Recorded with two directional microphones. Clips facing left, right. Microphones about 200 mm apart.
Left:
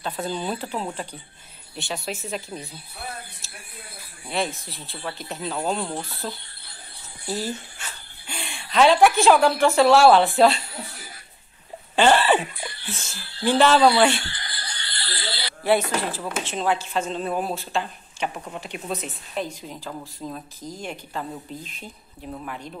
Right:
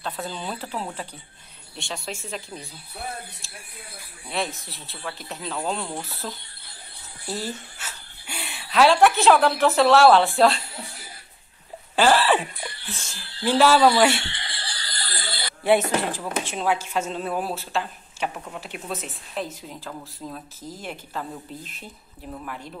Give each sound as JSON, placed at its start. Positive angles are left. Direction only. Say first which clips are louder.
{"t": 0.0, "sound": "a woman's voice", "louder": "left 4 dB", "side_deg": 0}
{"t": 11.9, "sound": "speech", "louder": "left 1 dB", "side_deg": -5}
{"t": 14.2, "sound": "a sound", "louder": "right 1 dB", "side_deg": -25}
{"t": 15.6, "sound": "a woman's voice", "louder": "right 1 dB", "side_deg": -15}